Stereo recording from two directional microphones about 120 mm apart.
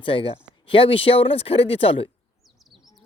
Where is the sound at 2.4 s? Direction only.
Centre (ahead or behind).